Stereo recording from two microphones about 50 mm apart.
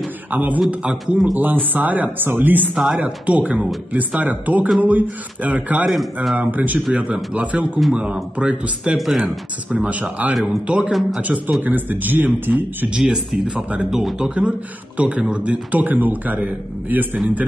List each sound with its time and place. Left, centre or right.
0.3 s a man's voice: right
1.0 s speech: centre
1.4 s speech: right
2.7 s speech: centre
3.0 s a man's voice: right
8.9 s speech: centre
9.7 s a man's voice: right
10.3 s speech: centre
11.1 s speech: right
12.9 s speech: centre
15.0 s a man's voice: right